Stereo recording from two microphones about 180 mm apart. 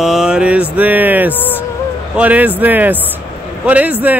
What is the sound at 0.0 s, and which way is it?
Mantra, 5° right (ahead or behind).